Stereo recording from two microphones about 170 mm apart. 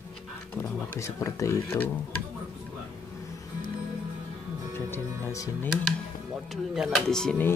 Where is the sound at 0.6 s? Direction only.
15° left (ahead or behind).